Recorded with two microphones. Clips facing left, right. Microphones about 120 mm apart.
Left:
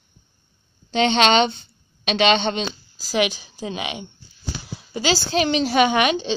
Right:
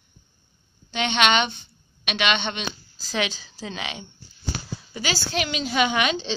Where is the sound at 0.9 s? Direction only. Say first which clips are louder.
Left 5 dB; 35° left (ahead or behind).